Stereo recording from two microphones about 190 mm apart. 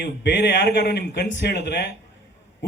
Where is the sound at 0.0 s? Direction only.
60° left (ahead or behind).